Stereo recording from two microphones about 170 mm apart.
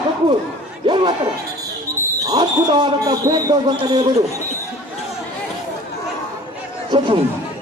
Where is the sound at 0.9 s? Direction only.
30° right (ahead or behind).